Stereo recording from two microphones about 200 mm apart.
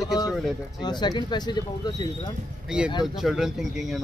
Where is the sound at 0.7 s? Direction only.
20° left (ahead or behind).